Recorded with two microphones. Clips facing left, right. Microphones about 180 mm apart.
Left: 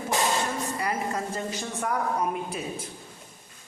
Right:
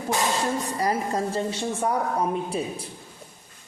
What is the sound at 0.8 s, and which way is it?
A woman's voice, 35° right (ahead or behind).